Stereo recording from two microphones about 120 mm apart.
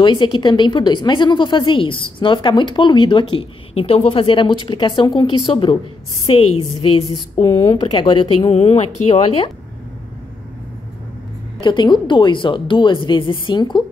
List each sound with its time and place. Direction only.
0.0 s a woman's voice: 40° left (ahead or behind)
7.4 s speech: 25° left (ahead or behind)
7.7 s a woman's voice: 45° left (ahead or behind)
8.4 s speech: 65° left (ahead or behind)
9.1 s a woman's voice: 45° left (ahead or behind)
11.6 s a woman's voice: 40° left (ahead or behind)